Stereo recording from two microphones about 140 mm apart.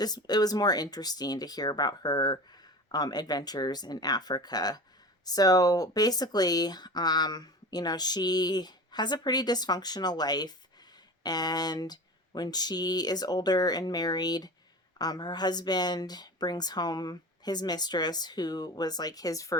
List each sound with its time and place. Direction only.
0.0 s speech: 30° left (ahead or behind)